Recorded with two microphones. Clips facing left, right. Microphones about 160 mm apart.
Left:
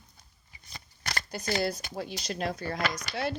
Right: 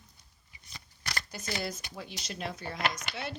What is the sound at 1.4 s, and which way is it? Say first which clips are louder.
Speech: left 8 dB; 35° left (ahead or behind).